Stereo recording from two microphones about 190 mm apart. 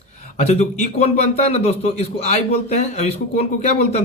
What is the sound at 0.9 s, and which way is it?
Speech, 35° left (ahead or behind).